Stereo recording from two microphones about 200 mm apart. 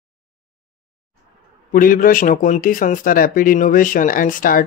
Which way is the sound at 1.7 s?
45° left (ahead or behind).